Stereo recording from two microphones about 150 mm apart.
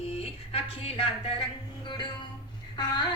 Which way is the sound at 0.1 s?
40° left (ahead or behind).